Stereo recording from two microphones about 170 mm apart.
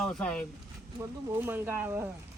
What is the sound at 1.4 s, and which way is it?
Speech, 10° right (ahead or behind).